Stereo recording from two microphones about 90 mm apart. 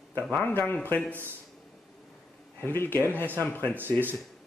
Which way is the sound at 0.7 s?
20° left (ahead or behind).